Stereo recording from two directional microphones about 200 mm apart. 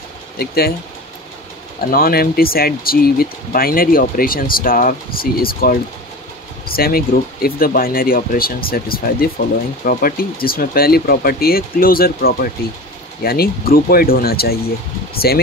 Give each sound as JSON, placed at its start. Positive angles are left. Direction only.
{"t": 0.4, "sound": "speech", "side_deg": 50}
{"t": 1.8, "sound": "speech", "side_deg": 45}